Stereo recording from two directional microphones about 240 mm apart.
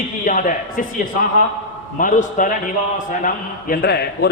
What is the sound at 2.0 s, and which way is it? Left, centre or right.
A man's voice, left.